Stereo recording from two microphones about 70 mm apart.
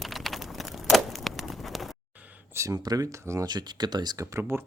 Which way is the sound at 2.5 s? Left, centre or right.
Right.